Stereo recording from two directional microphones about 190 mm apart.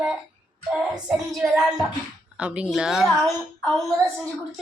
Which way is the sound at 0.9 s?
Centre (ahead or behind).